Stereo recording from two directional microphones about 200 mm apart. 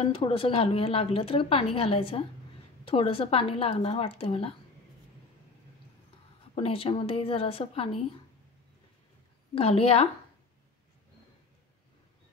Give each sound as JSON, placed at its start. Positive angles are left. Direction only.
{"t": 0.0, "sound": "a woman's voice", "side_deg": 25}
{"t": 6.5, "sound": "a woman's voice", "side_deg": 30}
{"t": 9.6, "sound": "a woman's voice", "side_deg": 30}